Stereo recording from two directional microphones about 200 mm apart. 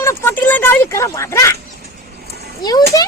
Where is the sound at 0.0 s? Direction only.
10° left (ahead or behind).